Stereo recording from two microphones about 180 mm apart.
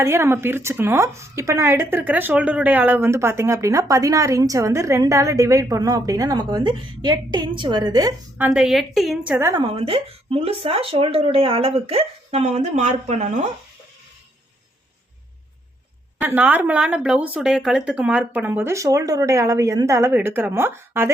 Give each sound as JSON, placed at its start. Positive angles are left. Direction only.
{"t": 0.0, "sound": "speech", "side_deg": -15}
{"t": 8.4, "sound": "a woman's voice", "side_deg": -5}
{"t": 9.3, "sound": "speech", "side_deg": -15}
{"t": 9.6, "sound": "speech", "side_deg": -30}
{"t": 16.2, "sound": "speech", "side_deg": -10}